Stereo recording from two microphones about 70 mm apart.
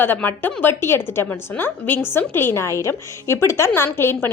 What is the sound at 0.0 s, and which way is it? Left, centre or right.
A woman's voice, left.